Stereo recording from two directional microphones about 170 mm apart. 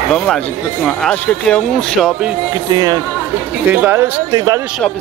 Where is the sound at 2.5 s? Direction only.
20° right (ahead or behind).